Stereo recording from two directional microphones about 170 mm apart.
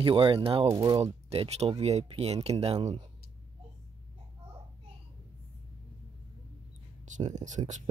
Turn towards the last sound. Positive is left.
turn(degrees=-45)  # may be behind; listen again after turning